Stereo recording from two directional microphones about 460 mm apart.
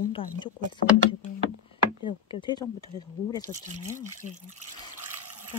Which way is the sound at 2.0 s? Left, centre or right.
Centre.